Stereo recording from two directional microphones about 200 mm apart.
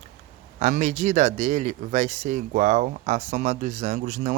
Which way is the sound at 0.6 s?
40° right (ahead or behind).